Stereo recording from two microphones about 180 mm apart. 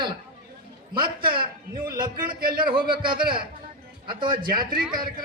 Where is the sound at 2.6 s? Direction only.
25° right (ahead or behind).